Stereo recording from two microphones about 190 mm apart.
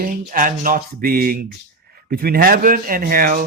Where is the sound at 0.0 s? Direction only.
45° right (ahead or behind).